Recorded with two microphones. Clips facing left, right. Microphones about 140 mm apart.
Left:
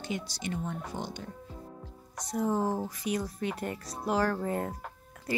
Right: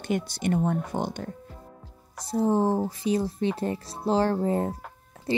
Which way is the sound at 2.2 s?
30° right (ahead or behind).